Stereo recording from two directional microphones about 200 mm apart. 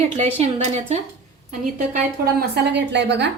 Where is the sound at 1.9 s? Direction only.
50° right (ahead or behind).